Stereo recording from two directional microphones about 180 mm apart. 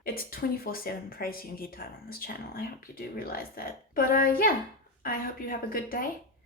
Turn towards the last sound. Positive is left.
turn(degrees=55)  # may be behind; listen again after turning